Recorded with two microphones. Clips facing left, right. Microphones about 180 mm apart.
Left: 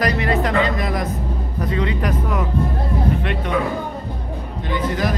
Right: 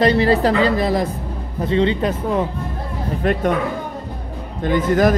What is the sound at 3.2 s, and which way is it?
Speech, 40° right (ahead or behind).